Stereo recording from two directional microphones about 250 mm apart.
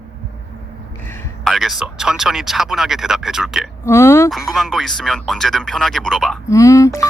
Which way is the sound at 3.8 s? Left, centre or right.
Centre.